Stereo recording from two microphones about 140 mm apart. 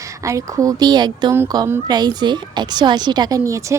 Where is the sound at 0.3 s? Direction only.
25° right (ahead or behind).